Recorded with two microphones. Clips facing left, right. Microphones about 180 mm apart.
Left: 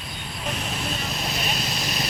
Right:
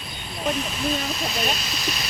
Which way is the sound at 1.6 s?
50° left (ahead or behind).